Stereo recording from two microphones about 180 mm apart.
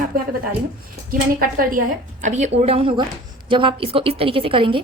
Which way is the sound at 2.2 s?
40° right (ahead or behind).